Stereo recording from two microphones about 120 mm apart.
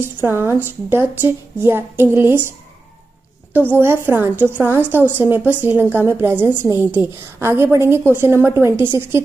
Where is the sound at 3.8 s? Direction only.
20° right (ahead or behind).